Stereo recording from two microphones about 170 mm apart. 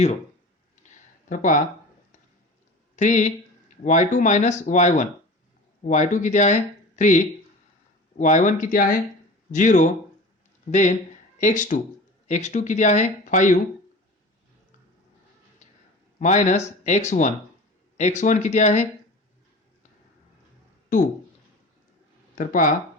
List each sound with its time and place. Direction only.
0.8 s a sound: 45° left (ahead or behind)
1.3 s speech: 50° left (ahead or behind)
2.9 s speech: 45° left (ahead or behind)
16.1 s speech: 45° left (ahead or behind)
22.4 s speech: 50° left (ahead or behind)